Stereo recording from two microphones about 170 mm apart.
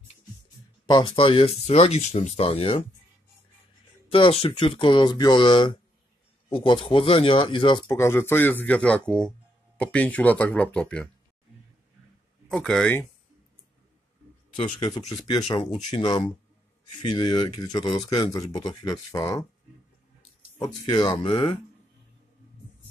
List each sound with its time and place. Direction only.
0.8 s speech: 25° left (ahead or behind)
4.1 s speech: 35° left (ahead or behind); by 11.1 s 5° left (ahead or behind)
12.4 s speech: 5° left (ahead or behind)
14.6 s speech: 25° left (ahead or behind)
20.5 s speech: 25° left (ahead or behind)